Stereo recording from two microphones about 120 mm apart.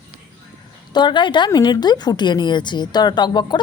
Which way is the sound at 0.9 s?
40° left (ahead or behind).